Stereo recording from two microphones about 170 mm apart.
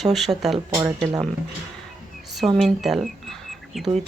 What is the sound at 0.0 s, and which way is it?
Speech, centre (ahead or behind).